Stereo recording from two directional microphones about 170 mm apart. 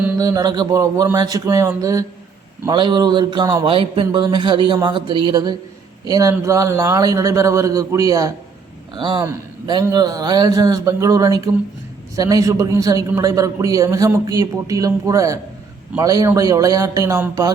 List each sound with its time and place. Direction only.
0.2 s a man's voice: 20° right (ahead or behind)